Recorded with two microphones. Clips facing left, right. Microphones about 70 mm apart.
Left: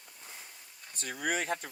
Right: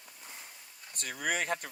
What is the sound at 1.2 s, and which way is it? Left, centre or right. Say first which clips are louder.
Speech: even; right.